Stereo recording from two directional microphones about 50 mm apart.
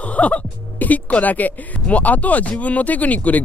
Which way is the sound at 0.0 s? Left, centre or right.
Left.